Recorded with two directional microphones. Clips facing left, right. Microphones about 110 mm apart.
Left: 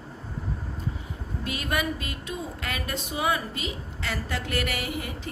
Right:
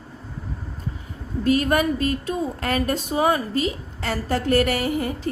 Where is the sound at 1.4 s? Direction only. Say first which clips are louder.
Right 10 dB; 40° right (ahead or behind).